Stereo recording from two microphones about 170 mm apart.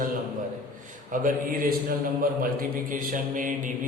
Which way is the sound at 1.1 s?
50° right (ahead or behind).